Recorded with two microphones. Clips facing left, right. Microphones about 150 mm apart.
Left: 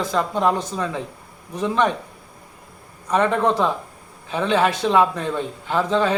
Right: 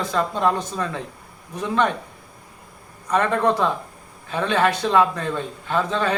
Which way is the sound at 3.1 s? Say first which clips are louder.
Left 1 dB; 15° left (ahead or behind).